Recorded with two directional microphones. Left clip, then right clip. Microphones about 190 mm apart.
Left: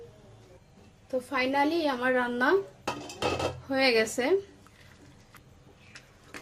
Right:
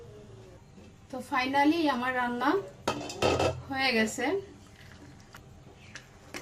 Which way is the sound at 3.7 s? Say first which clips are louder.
Left 7 dB; 60° left (ahead or behind).